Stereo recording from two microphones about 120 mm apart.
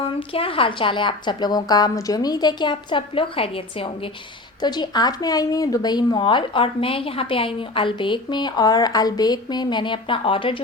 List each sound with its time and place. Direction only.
0.0 s speech: 50° left (ahead or behind)
4.6 s speech: 35° left (ahead or behind)